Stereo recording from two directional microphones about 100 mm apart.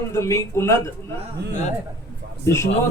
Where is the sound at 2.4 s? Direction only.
30° left (ahead or behind).